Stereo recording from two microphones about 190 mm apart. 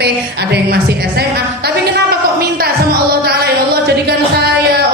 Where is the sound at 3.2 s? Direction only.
55° right (ahead or behind).